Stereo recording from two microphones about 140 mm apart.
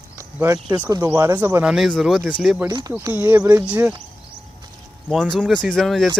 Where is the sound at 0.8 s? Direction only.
20° right (ahead or behind); by 2.3 s centre (ahead or behind).